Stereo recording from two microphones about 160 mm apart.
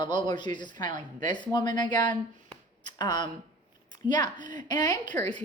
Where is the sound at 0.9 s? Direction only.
50° right (ahead or behind).